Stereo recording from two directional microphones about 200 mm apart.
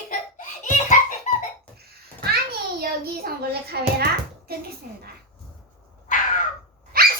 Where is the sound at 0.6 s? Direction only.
40° left (ahead or behind).